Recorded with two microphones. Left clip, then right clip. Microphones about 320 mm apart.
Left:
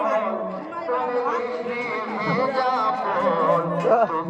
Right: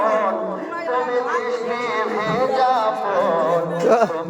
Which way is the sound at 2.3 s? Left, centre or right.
Centre.